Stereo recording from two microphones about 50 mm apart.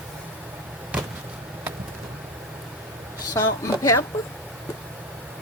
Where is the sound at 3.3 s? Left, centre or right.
Left.